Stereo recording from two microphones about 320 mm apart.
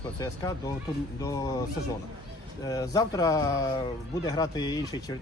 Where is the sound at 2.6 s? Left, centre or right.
Centre.